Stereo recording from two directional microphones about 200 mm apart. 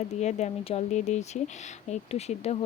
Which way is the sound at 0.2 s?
35° left (ahead or behind).